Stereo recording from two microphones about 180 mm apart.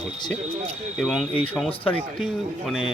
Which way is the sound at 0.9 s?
Centre (ahead or behind).